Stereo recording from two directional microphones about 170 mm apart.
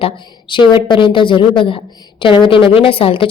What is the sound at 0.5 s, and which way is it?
A woman's voice, 30° left (ahead or behind).